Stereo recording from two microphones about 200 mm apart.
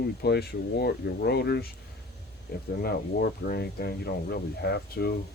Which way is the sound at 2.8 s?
50° left (ahead or behind).